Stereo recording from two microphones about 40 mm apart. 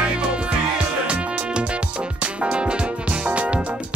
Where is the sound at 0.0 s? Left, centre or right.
Right.